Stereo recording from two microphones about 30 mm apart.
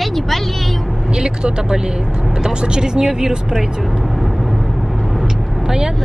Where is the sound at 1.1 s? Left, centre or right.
Right.